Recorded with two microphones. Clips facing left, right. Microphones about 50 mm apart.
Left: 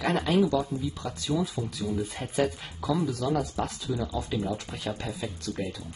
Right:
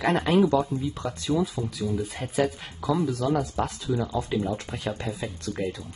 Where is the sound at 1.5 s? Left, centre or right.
Centre; by 4.4 s right.